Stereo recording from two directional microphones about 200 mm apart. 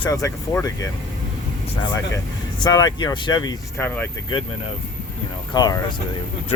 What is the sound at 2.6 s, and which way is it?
Speech, 20° left (ahead or behind).